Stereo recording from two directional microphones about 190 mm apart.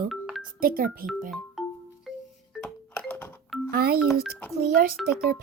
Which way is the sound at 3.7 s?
55° right (ahead or behind).